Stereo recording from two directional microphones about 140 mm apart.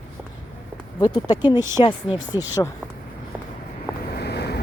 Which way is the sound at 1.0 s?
30° left (ahead or behind).